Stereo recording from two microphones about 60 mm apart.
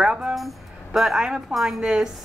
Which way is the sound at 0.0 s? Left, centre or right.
Centre.